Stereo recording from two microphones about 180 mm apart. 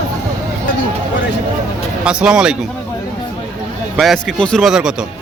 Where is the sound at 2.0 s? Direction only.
5° right (ahead or behind).